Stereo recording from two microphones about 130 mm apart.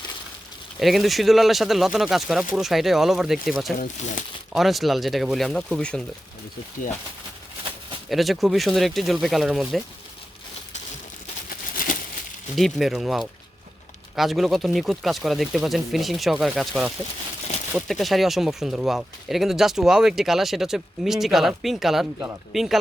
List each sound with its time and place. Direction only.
0.8 s speech: centre (ahead or behind)
3.8 s speech: 90° left
4.5 s speech: centre (ahead or behind)
8.1 s speech: centre (ahead or behind)
11.4 s a sound: 90° left
12.5 s speech: centre (ahead or behind)